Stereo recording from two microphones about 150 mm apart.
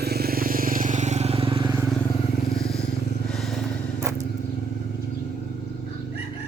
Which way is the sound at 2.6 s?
5° left (ahead or behind).